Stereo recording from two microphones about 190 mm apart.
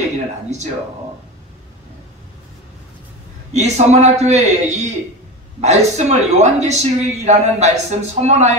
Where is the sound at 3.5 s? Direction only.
35° right (ahead or behind).